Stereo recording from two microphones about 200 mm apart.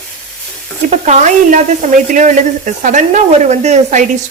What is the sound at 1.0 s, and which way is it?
Speech, 35° right (ahead or behind).